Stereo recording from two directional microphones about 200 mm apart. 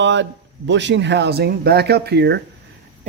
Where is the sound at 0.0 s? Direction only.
65° right (ahead or behind).